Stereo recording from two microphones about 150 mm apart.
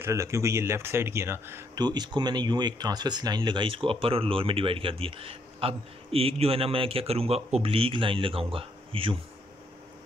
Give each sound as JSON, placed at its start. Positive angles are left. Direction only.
{"t": 0.0, "sound": "speech", "side_deg": -20}
{"t": 1.8, "sound": "speech", "side_deg": -30}